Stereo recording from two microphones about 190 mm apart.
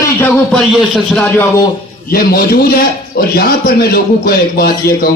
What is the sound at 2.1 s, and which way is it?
A man's voice, 55° left (ahead or behind).